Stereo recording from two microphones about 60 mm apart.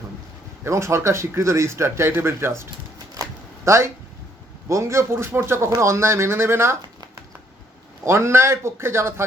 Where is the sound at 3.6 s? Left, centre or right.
Right.